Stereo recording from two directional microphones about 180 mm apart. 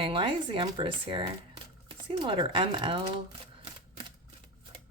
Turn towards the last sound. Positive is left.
turn(degrees=-30)  # may be behind; listen again after turning